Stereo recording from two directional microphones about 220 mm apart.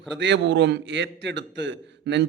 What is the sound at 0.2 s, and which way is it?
A man's voice, 55° right (ahead or behind).